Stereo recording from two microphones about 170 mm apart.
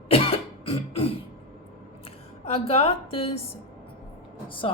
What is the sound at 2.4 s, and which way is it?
Speech, 35° left (ahead or behind).